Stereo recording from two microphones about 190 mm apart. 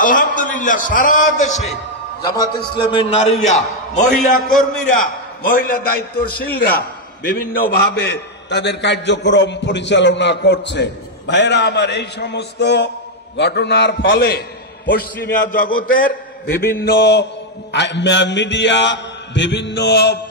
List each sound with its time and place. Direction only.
0.0 s a man's voice: 45° left (ahead or behind)
2.2 s a man's voice: 20° left (ahead or behind)
2.9 s a man's voice: 35° left (ahead or behind); by 7.6 s 50° left (ahead or behind)
7.7 s a man's voice: 60° left (ahead or behind)